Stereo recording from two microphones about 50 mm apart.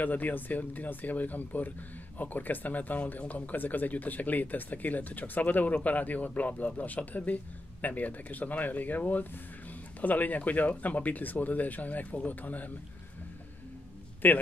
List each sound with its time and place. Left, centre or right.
0.0 s speech: left
14.2 s speech: left